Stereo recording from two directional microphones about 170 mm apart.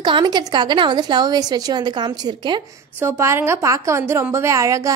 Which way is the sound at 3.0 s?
15° right (ahead or behind).